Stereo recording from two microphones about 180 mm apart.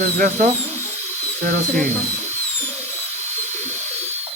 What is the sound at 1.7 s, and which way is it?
Speech, 10° left (ahead or behind).